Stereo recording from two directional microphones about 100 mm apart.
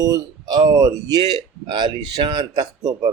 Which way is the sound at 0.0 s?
40° right (ahead or behind).